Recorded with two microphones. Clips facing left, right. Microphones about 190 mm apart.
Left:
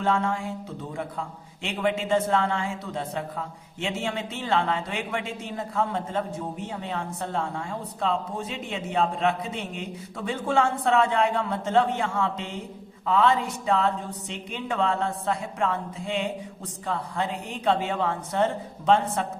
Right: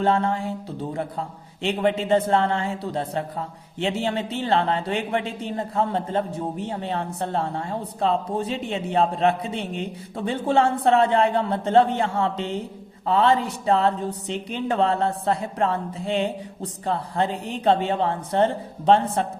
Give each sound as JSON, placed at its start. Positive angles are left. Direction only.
{"t": 0.0, "sound": "speech", "side_deg": -30}